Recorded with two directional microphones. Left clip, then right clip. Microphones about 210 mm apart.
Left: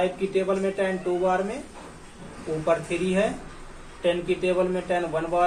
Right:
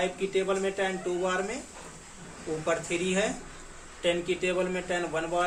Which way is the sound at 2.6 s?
20° right (ahead or behind).